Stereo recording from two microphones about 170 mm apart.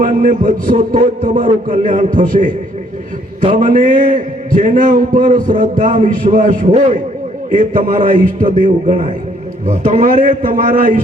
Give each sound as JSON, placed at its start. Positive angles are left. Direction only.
{"t": 0.0, "sound": "a man's voice", "side_deg": -50}